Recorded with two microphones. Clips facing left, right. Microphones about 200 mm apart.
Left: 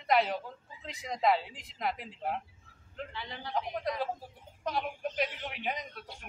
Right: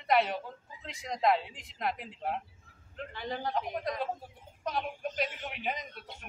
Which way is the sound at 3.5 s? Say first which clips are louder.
Left 5 dB; centre (ahead or behind).